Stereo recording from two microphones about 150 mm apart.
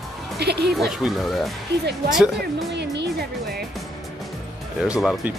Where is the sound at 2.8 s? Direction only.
90° right.